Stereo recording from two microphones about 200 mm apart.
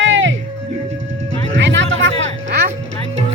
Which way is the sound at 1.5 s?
65° right (ahead or behind).